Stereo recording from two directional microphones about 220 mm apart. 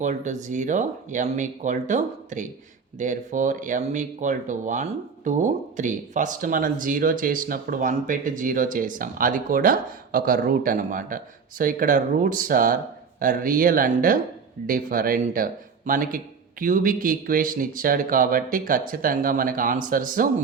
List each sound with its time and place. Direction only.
0.0 s speech: 35° right (ahead or behind)